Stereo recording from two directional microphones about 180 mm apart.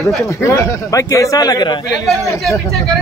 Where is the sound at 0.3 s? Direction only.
15° left (ahead or behind).